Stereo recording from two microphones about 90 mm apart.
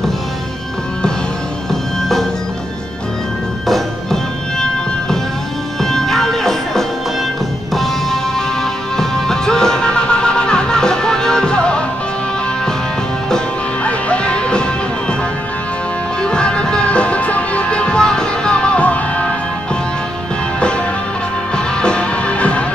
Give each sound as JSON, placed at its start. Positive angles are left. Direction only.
{"t": 1.7, "sound": "music", "side_deg": 5}
{"t": 3.6, "sound": "music", "side_deg": 5}
{"t": 5.8, "sound": "music", "side_deg": 5}
{"t": 13.8, "sound": "music", "side_deg": 15}
{"t": 16.2, "sound": "music", "side_deg": 10}
{"t": 21.5, "sound": "music", "side_deg": 10}